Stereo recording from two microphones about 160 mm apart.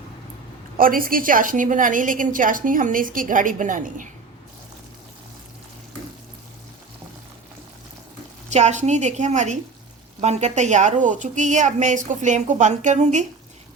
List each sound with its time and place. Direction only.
0.8 s a woman's voice: 60° right (ahead or behind)
8.4 s a woman's voice: 45° right (ahead or behind)